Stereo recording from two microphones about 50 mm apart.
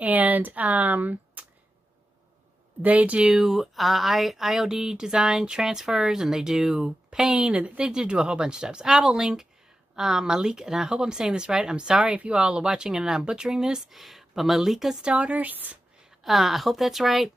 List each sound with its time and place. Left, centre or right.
0.0 s speech: right
2.8 s speech: right
3.2 s speech: centre
7.3 s a woman's voice: right; by 15.0 s centre
15.0 s speech: right
16.3 s a woman's voice: centre